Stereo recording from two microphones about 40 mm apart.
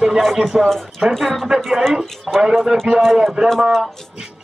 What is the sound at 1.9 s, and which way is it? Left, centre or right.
Speech, centre.